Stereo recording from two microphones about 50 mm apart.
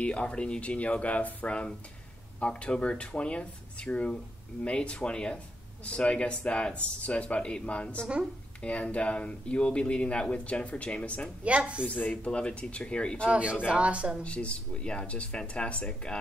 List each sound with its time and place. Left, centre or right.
0.0 s speech: left
11.4 s a woman's voice: right
12.0 s speech: left
13.3 s a woman's voice: right
14.2 s speech: left